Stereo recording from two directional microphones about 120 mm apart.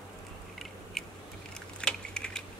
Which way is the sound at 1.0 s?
5° left (ahead or behind).